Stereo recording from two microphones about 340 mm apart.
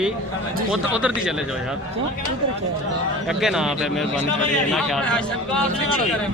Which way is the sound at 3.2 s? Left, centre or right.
Centre.